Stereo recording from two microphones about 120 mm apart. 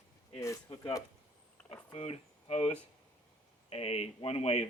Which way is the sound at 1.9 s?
55° left (ahead or behind).